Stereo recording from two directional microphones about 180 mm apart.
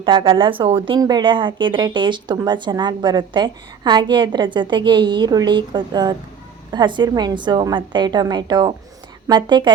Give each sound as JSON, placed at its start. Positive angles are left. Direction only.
{"t": 0.0, "sound": "speech", "side_deg": -30}